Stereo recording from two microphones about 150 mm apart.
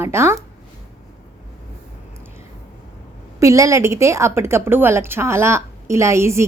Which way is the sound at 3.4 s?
20° right (ahead or behind).